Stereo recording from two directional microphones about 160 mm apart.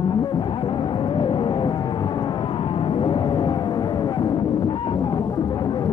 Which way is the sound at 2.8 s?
30° left (ahead or behind).